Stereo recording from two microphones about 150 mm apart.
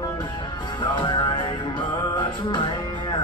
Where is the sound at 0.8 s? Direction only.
30° left (ahead or behind).